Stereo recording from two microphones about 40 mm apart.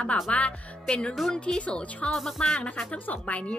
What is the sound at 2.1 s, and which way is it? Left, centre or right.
Speech, centre.